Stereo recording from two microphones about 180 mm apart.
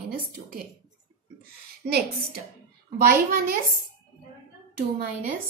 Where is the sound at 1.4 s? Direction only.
60° right (ahead or behind).